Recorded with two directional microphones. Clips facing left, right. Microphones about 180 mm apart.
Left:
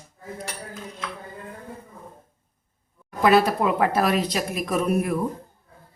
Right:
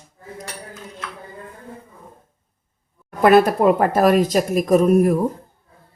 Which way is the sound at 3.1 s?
55° right (ahead or behind).